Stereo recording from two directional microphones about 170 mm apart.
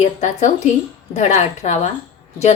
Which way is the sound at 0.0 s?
45° left (ahead or behind).